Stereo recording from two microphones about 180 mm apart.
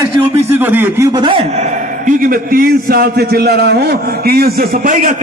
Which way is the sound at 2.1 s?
50° right (ahead or behind).